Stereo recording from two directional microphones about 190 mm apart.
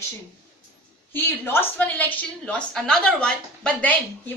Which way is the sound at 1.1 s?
10° left (ahead or behind).